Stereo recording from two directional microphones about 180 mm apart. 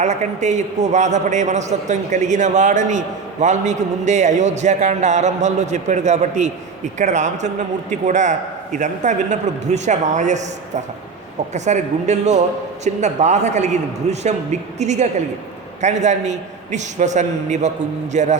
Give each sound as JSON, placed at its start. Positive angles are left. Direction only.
{"t": 0.0, "sound": "a man's voice", "side_deg": -40}
{"t": 11.5, "sound": "a man's voice", "side_deg": -40}